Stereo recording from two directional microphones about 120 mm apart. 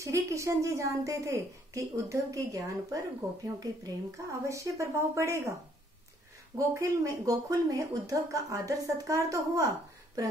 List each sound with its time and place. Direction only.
0.0 s speech: 25° right (ahead or behind)
6.7 s speech: 25° right (ahead or behind)